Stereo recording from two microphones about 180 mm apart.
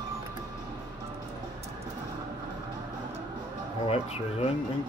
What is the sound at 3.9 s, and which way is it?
Speech, 35° left (ahead or behind).